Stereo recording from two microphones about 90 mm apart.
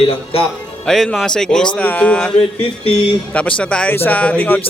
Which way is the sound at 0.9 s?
5° left (ahead or behind).